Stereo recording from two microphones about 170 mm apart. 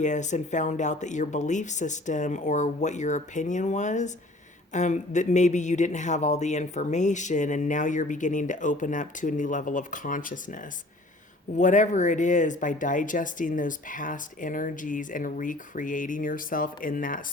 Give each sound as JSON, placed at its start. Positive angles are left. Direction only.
{"t": 0.0, "sound": "speech", "side_deg": 45}